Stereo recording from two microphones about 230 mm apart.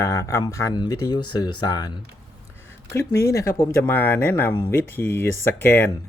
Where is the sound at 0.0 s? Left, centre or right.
Centre.